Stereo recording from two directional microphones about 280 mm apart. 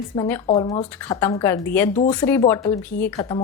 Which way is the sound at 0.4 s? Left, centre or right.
Centre.